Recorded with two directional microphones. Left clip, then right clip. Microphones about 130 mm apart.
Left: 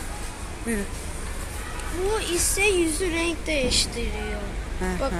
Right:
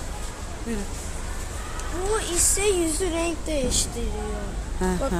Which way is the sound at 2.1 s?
30° right (ahead or behind).